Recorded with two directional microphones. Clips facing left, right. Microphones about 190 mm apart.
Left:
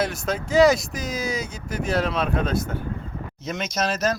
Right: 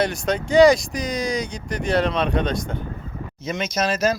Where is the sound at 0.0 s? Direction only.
5° left (ahead or behind).